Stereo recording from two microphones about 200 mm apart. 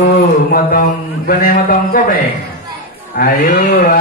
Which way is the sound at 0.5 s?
50° left (ahead or behind).